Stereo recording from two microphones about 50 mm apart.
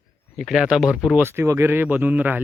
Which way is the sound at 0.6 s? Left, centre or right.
Centre.